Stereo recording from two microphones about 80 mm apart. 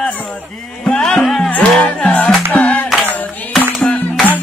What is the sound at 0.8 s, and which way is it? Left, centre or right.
Music, centre.